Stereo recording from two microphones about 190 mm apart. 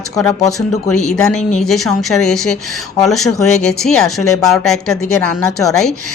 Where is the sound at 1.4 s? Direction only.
35° left (ahead or behind).